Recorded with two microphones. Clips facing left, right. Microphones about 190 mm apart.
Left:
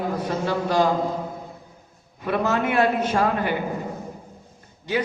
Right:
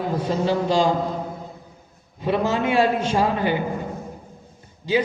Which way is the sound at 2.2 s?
30° right (ahead or behind).